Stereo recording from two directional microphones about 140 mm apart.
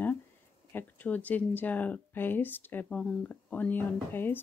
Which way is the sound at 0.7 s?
10° left (ahead or behind).